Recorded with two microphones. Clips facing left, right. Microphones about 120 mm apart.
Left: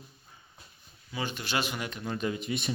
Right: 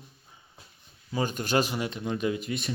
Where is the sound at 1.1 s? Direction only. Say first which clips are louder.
Right 6 dB; 40° right (ahead or behind).